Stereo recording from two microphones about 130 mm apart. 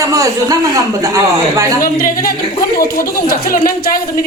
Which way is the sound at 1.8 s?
90° left.